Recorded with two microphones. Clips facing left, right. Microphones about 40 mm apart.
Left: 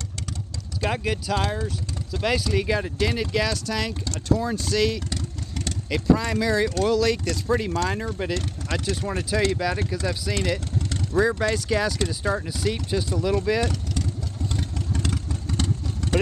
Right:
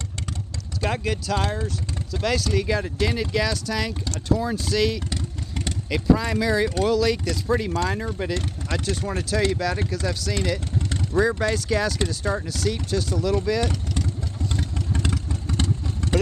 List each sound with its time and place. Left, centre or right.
0.7 s speech: centre
9.6 s speech: centre
11.1 s speech: centre
12.5 s speech: centre
14.9 s vehicle: right